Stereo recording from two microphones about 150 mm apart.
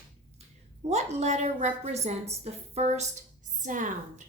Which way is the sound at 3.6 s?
60° right (ahead or behind).